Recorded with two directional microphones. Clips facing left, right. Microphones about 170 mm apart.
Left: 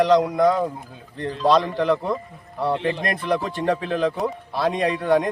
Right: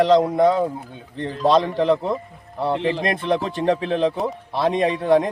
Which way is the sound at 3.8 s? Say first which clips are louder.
Right 2 dB; 30° right (ahead or behind).